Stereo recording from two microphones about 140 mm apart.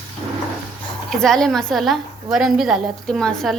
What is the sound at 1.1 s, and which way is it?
A woman's voice, centre (ahead or behind).